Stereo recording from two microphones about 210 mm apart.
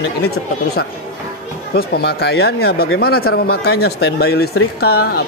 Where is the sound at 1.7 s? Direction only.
50° left (ahead or behind).